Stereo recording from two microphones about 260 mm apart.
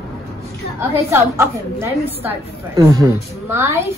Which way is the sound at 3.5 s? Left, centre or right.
Centre.